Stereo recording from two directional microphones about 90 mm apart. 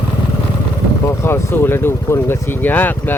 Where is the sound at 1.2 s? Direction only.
25° left (ahead or behind).